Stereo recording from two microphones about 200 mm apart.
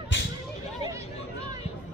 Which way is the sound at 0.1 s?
65° left (ahead or behind).